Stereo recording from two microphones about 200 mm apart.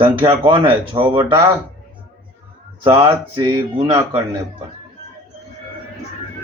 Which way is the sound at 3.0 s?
25° right (ahead or behind).